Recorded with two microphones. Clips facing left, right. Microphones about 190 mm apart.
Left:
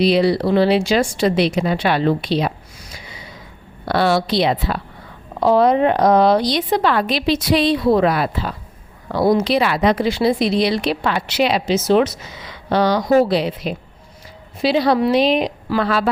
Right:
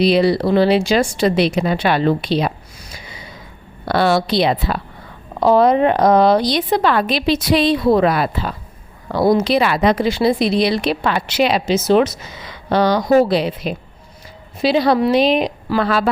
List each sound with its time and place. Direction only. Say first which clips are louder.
0.0 s speech: right 1 dB; 50° right (ahead or behind)
3.8 s speech: right 1 dB; 50° right (ahead or behind)